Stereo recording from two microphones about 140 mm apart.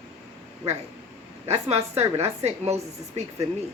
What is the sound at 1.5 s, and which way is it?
A woman's voice, 50° right (ahead or behind).